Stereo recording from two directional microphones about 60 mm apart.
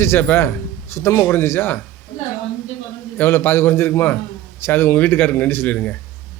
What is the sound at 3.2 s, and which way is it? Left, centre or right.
A man's voice, left.